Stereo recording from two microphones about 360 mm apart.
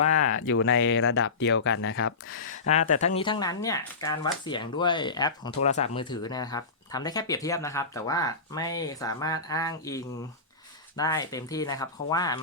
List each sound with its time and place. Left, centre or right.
0.2 s speech: left
3.2 s speech: centre